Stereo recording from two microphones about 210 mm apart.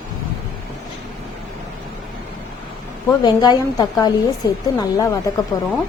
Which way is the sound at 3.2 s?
20° left (ahead or behind).